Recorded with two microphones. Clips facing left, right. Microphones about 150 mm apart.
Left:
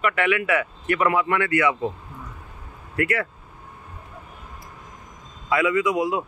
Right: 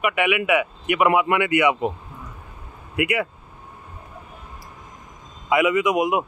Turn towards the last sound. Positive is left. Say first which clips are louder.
# right 2 dB
turn(degrees=-20)  # may be behind; listen again after turning